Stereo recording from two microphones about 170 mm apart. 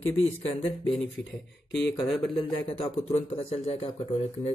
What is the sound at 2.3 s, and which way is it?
A man's voice, 35° left (ahead or behind).